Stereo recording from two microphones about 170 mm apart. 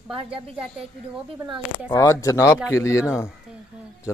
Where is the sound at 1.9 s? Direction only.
20° left (ahead or behind).